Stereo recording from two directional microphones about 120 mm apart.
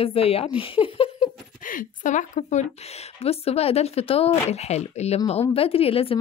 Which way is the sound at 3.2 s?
55° left (ahead or behind).